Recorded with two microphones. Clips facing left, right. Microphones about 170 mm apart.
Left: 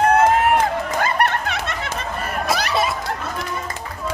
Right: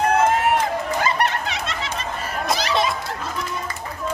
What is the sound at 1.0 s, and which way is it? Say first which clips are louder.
Snicker: left 2 dB; 55° left (ahead or behind).